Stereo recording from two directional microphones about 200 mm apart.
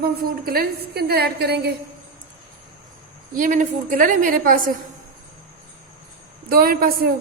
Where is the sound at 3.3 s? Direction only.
40° right (ahead or behind).